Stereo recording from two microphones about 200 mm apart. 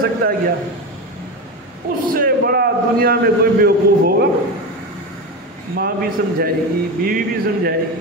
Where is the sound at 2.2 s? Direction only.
50° right (ahead or behind).